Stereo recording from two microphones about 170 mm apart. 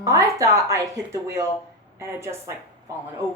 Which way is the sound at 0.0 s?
20° right (ahead or behind).